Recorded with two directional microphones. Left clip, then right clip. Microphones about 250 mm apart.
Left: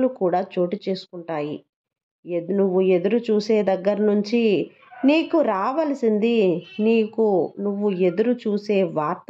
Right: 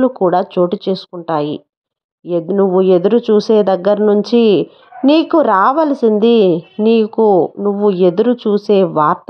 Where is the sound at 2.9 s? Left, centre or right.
Right.